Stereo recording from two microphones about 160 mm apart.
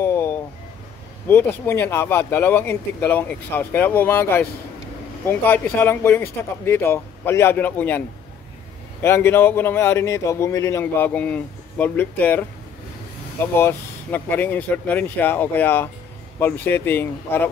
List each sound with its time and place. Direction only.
0.0 s a sound: 15° left (ahead or behind)
1.2 s a man's voice: 15° left (ahead or behind)
9.0 s a man's voice: 15° left (ahead or behind)
13.6 s a man's voice: 15° left (ahead or behind)